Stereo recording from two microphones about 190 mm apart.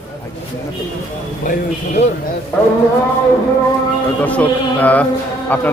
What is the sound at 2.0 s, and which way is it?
Speech, 35° left (ahead or behind).